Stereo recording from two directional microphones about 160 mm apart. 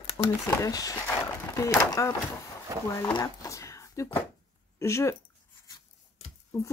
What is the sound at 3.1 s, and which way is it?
Speech, 20° left (ahead or behind).